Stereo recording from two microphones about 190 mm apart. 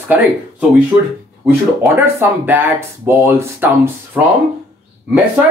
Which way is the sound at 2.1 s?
10° right (ahead or behind).